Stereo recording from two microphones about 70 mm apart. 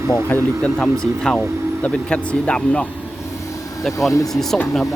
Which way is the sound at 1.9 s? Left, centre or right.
Centre.